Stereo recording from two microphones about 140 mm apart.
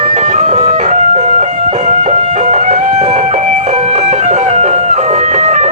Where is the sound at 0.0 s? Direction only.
75° right (ahead or behind).